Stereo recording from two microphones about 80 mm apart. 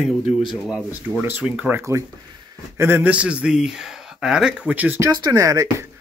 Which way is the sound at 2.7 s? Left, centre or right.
Right.